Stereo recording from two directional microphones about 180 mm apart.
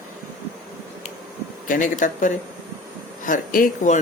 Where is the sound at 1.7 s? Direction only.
45° left (ahead or behind).